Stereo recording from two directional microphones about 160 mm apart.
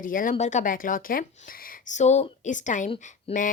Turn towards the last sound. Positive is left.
turn(degrees=35)  # may be behind; listen again after turning